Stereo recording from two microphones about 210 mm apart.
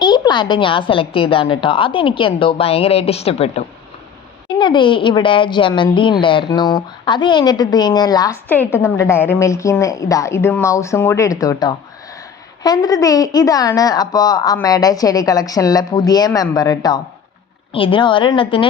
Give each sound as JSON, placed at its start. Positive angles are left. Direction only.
{"t": 0.0, "sound": "a woman's voice", "side_deg": 20}